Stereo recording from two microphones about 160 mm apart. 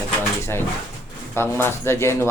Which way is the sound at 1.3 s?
15° left (ahead or behind).